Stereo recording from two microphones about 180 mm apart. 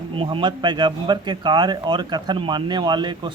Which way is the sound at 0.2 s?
25° right (ahead or behind).